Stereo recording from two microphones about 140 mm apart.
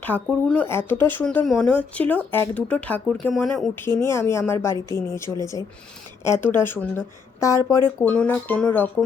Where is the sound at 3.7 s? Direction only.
15° left (ahead or behind).